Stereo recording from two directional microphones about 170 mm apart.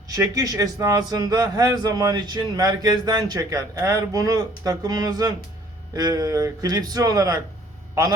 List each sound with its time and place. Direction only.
0.2 s a man's voice: 20° right (ahead or behind)